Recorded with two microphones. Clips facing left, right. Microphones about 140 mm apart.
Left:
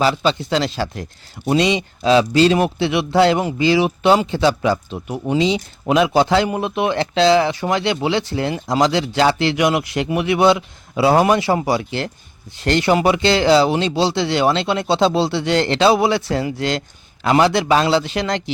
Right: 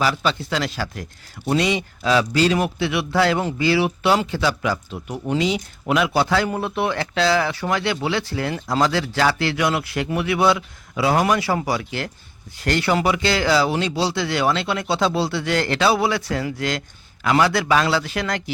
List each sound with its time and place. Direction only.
0.0 s speech: 25° left (ahead or behind)